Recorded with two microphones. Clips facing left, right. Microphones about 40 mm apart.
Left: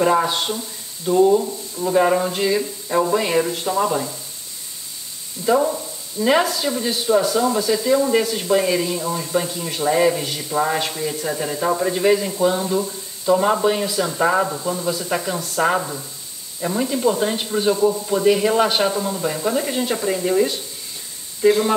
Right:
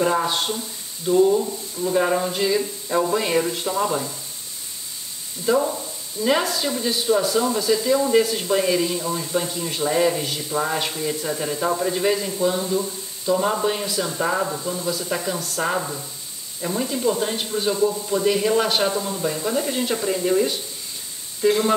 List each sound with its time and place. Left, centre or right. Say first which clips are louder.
0.0 s speech: left 3 dB; centre
5.4 s speech: left 3 dB; centre
13.6 s speech: left 4 dB; centre